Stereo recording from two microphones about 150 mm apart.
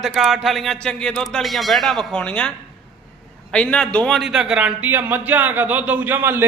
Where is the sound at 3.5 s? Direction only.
10° left (ahead or behind).